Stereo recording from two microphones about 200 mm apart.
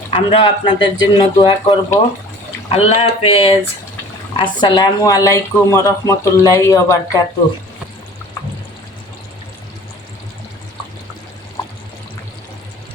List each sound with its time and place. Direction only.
0.1 s speech: 25° left (ahead or behind)